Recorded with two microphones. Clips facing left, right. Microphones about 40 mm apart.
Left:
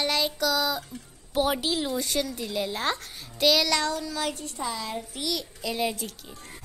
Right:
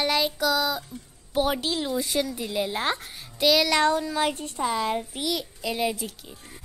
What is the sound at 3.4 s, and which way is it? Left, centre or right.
Speech, centre.